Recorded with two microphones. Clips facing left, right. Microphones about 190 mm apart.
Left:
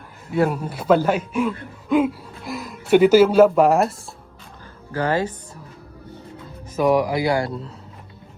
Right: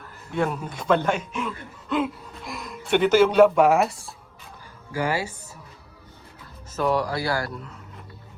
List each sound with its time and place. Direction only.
0.3 s speech: 5° left (ahead or behind)
4.9 s speech: 10° right (ahead or behind)
6.7 s speech: 15° left (ahead or behind)